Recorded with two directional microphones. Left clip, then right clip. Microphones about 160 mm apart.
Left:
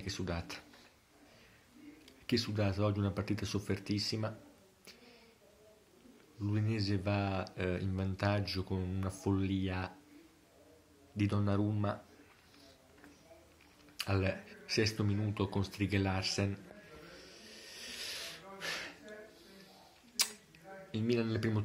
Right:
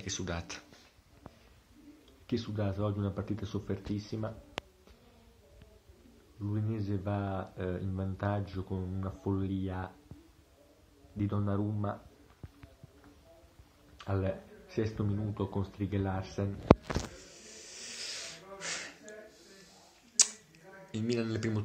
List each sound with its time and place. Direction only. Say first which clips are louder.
0.0 s speech: right 2 dB; 5° left (ahead or behind)
2.2 s speech: left 1 dB; 15° left (ahead or behind)
6.4 s speech: left 1 dB; 20° left (ahead or behind)
11.1 s speech: even; 15° left (ahead or behind)
13.9 s speech: even; 15° left (ahead or behind)
17.1 s snake: right 2 dB; centre (ahead or behind)
20.2 s camera: right 6 dB; 5° left (ahead or behind)
20.9 s speech: even; 5° left (ahead or behind)